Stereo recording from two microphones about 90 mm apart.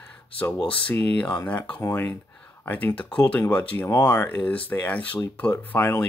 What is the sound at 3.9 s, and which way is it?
Speech, 35° left (ahead or behind).